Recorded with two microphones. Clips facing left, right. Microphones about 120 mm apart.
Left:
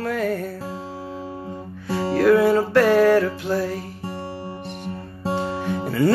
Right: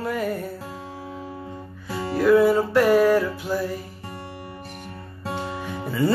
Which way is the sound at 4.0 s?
30° left (ahead or behind).